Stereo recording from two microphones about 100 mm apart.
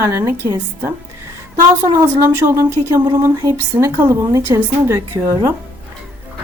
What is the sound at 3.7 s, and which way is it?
Speech, 30° right (ahead or behind).